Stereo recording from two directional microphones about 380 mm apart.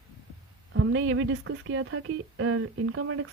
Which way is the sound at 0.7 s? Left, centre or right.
Right.